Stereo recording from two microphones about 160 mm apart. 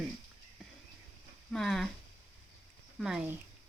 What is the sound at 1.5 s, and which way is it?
Speech, 5° left (ahead or behind).